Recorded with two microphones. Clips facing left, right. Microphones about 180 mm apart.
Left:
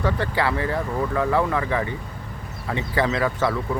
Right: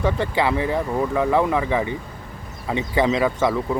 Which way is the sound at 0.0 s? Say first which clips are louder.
Right 2 dB; 20° right (ahead or behind).